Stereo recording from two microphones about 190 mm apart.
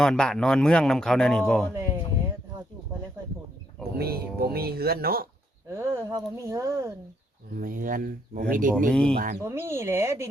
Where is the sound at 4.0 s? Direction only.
55° right (ahead or behind).